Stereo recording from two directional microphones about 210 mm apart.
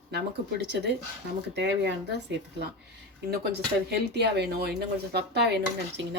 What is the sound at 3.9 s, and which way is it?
Speech, 50° right (ahead or behind).